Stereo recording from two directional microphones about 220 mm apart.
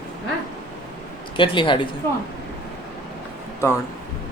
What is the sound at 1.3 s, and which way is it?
Speech, 20° left (ahead or behind).